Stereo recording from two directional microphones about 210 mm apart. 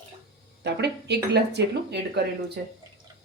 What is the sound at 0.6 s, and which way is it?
A woman's voice, 55° right (ahead or behind).